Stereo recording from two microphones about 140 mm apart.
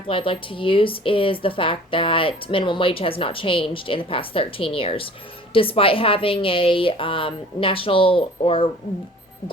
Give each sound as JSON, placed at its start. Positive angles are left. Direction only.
{"t": 0.1, "sound": "speech", "side_deg": 40}